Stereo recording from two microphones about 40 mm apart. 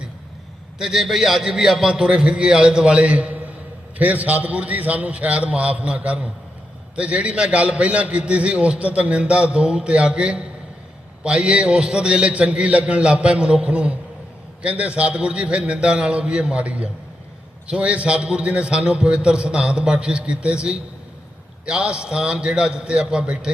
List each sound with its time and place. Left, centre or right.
0.8 s a man's voice: centre
1.9 s a man's voice: right